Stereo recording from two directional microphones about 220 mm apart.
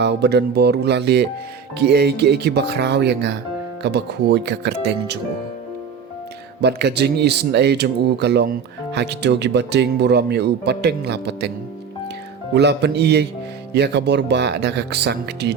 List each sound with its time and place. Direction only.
0.0 s speech: 50° right (ahead or behind)
6.6 s speech: 50° right (ahead or behind)
12.5 s speech: 50° right (ahead or behind)